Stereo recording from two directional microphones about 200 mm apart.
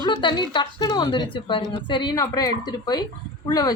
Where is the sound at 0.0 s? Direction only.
20° left (ahead or behind).